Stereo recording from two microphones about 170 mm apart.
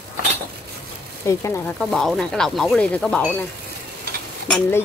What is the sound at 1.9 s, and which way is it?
Speech, centre (ahead or behind).